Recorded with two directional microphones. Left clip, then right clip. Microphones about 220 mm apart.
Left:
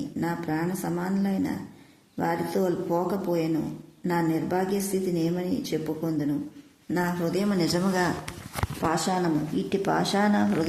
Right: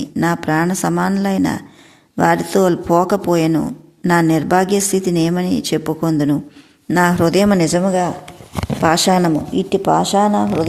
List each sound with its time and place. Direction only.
0.2 s a woman's voice: 45° right (ahead or behind)
8.8 s a woman's voice: 45° right (ahead or behind)
9.6 s speech: 25° right (ahead or behind)